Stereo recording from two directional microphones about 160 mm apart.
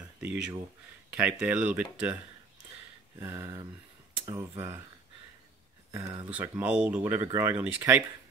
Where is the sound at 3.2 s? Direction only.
15° right (ahead or behind).